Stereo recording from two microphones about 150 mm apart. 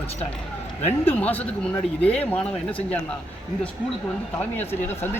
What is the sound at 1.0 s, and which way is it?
Speech, 10° left (ahead or behind).